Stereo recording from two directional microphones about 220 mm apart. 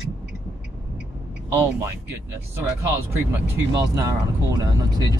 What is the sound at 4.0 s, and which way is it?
Speech, 15° right (ahead or behind).